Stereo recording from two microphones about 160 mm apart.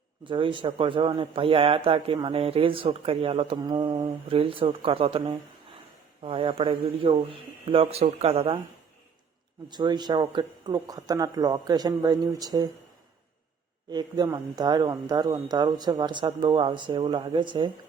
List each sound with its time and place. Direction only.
0.3 s speech: 30° right (ahead or behind)
3.6 s speech: 25° right (ahead or behind)
6.2 s speech: 30° right (ahead or behind)
9.6 s speech: 25° right (ahead or behind)
13.9 s speech: 25° right (ahead or behind)